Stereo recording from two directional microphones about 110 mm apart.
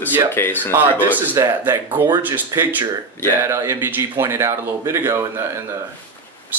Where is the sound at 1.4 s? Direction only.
20° right (ahead or behind).